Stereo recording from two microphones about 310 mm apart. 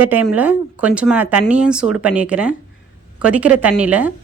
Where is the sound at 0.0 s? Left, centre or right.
Centre.